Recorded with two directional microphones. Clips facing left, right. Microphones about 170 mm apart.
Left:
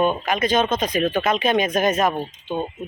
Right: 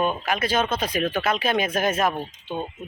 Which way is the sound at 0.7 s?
15° left (ahead or behind).